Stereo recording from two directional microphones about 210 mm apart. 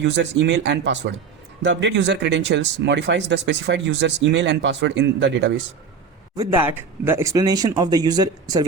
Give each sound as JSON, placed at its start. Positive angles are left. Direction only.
{"t": 0.0, "sound": "speech", "side_deg": -55}
{"t": 6.3, "sound": "speech", "side_deg": -25}
{"t": 6.7, "sound": "speech", "side_deg": -10}